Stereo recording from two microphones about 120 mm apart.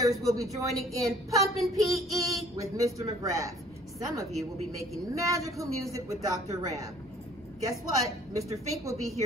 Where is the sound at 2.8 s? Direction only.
25° right (ahead or behind).